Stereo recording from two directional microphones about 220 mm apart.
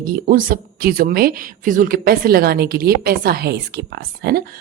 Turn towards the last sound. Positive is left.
turn(degrees=-45)  # may be behind; listen again after turning